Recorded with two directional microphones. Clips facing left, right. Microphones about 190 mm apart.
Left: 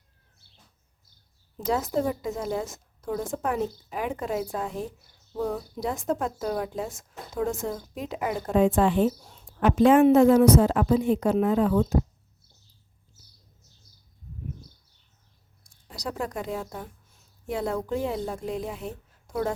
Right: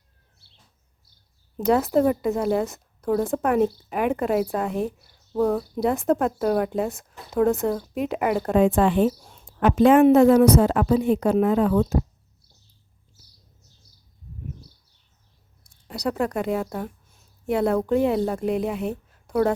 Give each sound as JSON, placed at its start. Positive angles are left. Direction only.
{"t": 1.5, "sound": "a woman's voice", "side_deg": -65}
{"t": 15.9, "sound": "speech", "side_deg": -65}